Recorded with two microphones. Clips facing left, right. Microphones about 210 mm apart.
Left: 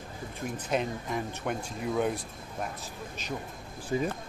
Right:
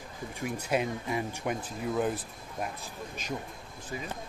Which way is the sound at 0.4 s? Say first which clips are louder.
Right 1 dB; 10° right (ahead or behind).